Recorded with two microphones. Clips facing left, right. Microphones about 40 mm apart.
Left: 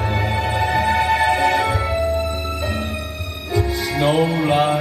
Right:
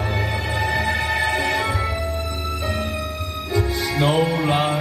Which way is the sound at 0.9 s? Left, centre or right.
Left.